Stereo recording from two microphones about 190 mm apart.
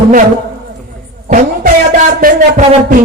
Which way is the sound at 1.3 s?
45° right (ahead or behind).